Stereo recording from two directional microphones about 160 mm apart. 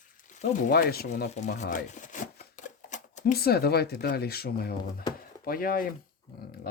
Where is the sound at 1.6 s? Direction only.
55° left (ahead or behind).